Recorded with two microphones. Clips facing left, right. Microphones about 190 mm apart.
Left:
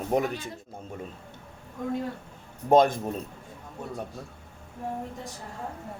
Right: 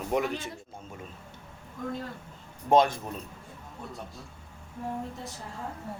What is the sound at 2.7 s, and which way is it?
Speech, 50° left (ahead or behind).